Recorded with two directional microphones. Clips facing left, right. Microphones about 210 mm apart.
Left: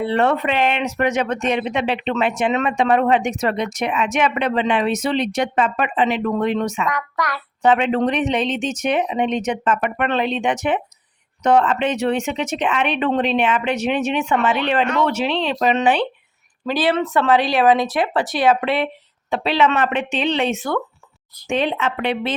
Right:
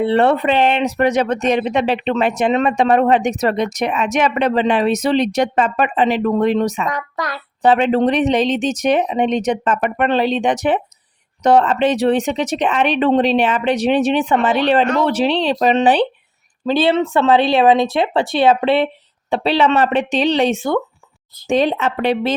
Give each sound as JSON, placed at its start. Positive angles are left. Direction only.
{"t": 0.0, "sound": "speech", "side_deg": -30}
{"t": 21.4, "sound": "speech", "side_deg": -35}